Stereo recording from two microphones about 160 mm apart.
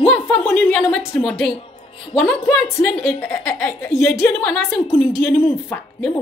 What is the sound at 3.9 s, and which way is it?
Speech, centre (ahead or behind).